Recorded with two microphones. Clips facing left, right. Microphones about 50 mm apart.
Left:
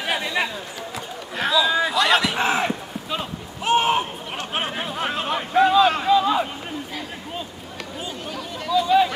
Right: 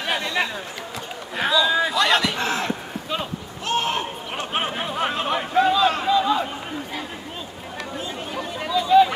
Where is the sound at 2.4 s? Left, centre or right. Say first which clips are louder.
Left 3 dB; centre.